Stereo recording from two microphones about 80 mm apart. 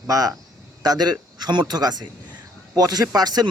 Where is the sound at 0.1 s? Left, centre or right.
Right.